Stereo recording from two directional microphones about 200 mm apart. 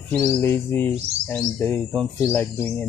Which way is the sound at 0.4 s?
10° left (ahead or behind).